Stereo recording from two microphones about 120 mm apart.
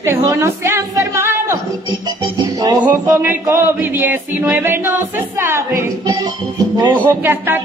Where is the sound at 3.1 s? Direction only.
15° right (ahead or behind).